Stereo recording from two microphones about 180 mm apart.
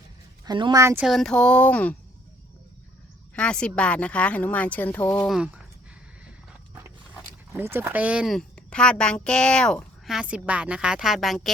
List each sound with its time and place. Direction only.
0.4 s speech: 25° right (ahead or behind)
1.0 s speech: centre (ahead or behind)
3.3 s speech: 5° left (ahead or behind)
5.3 s speech: 5° right (ahead or behind)
7.5 s speech: 10° right (ahead or behind)